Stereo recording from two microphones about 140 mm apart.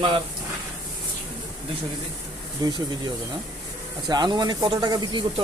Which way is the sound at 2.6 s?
30° right (ahead or behind).